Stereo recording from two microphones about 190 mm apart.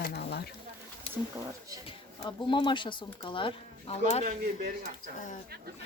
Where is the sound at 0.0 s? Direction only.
55° left (ahead or behind).